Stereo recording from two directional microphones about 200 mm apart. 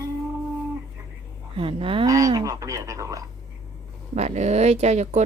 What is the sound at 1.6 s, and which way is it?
Speech, 25° right (ahead or behind).